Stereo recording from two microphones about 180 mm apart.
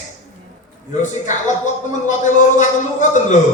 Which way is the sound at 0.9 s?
45° left (ahead or behind).